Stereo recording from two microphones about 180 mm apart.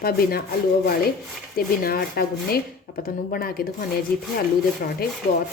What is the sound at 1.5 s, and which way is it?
Speech, 60° left (ahead or behind).